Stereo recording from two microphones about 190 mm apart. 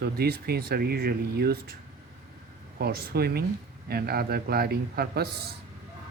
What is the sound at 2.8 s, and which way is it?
A man's voice, 55° right (ahead or behind).